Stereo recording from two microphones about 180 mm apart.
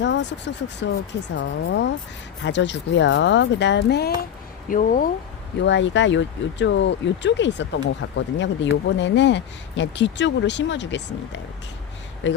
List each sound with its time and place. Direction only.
0.0 s speech: 75° left (ahead or behind)
4.7 s speech: 50° left (ahead or behind)
5.5 s speech: 85° left